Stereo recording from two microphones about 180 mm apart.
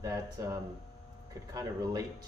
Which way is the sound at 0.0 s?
20° right (ahead or behind).